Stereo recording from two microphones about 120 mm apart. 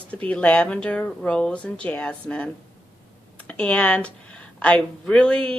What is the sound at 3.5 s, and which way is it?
Speech, 10° left (ahead or behind).